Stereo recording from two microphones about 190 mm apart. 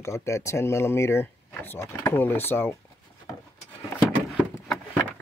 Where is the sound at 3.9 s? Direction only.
5° right (ahead or behind).